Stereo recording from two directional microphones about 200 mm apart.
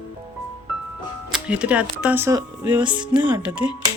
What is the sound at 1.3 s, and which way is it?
Speech, 5° right (ahead or behind).